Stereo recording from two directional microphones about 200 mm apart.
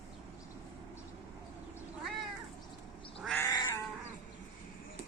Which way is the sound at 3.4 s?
15° left (ahead or behind).